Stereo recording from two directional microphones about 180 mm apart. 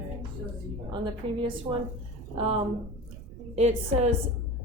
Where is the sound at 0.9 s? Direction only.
25° right (ahead or behind).